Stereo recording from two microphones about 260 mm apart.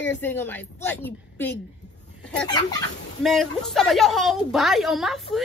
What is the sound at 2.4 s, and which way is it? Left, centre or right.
Chicken, centre.